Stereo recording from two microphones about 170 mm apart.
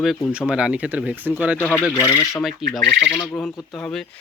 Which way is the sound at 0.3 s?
5° right (ahead or behind).